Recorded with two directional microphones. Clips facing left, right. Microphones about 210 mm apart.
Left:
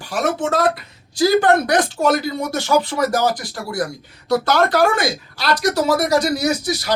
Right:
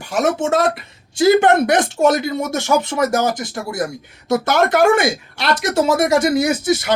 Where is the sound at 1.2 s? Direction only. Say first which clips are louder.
Right 2 dB; 25° right (ahead or behind).